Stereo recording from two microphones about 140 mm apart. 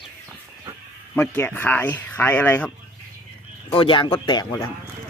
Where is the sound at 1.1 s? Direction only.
15° left (ahead or behind).